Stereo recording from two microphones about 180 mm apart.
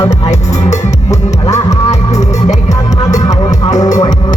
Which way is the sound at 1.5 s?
20° left (ahead or behind).